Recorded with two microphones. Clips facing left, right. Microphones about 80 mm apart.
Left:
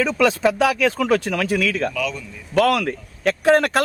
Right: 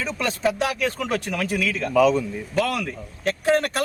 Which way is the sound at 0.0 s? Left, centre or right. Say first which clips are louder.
Left 6 dB; left.